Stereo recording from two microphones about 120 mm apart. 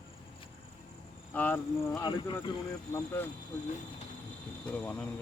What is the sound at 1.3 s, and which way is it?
Speech, 15° left (ahead or behind).